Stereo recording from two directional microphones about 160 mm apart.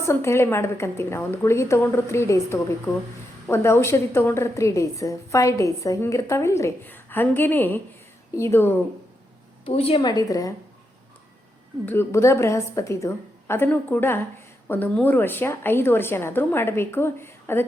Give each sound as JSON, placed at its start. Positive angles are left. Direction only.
{"t": 0.0, "sound": "a woman's voice", "side_deg": 15}
{"t": 9.6, "sound": "a woman's voice", "side_deg": 35}
{"t": 10.0, "sound": "a woman's voice", "side_deg": 25}
{"t": 11.9, "sound": "a woman's voice", "side_deg": 15}